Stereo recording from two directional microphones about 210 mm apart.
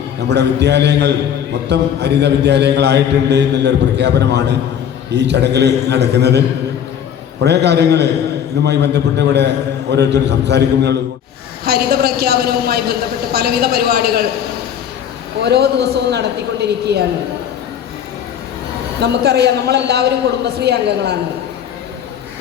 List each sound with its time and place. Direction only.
0.3 s a man's voice: 55° right (ahead or behind)
7.4 s a man's voice: 55° right (ahead or behind)
15.4 s a man's voice: 50° right (ahead or behind)
18.9 s a man's voice: 50° right (ahead or behind)